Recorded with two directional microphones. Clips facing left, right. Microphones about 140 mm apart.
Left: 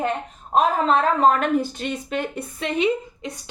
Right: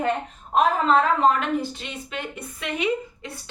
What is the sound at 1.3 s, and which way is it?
Speech, 45° left (ahead or behind).